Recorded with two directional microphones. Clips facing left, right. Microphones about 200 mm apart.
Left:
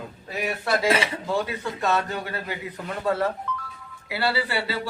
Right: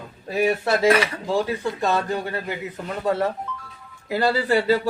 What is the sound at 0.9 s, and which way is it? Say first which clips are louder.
Speech: right 5 dB; 25° left (ahead or behind).